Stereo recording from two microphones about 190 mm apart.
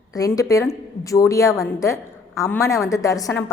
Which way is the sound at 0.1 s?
20° left (ahead or behind).